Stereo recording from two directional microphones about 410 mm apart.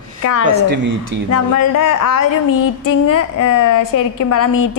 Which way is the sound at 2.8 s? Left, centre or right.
Left.